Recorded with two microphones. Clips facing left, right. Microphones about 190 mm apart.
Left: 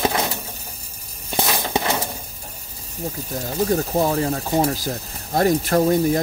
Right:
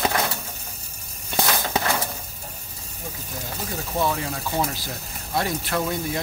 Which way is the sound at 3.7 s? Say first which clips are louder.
Left 4 dB; 40° left (ahead or behind).